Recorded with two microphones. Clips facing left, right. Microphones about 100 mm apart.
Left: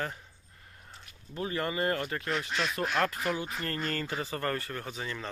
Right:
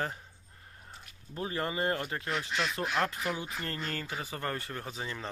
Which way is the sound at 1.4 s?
30° right (ahead or behind).